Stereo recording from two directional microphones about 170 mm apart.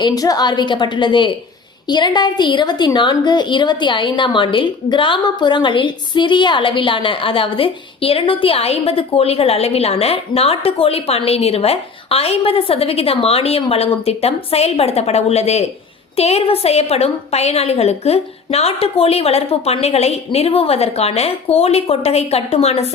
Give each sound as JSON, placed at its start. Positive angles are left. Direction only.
{"t": 0.0, "sound": "a woman's voice", "side_deg": 20}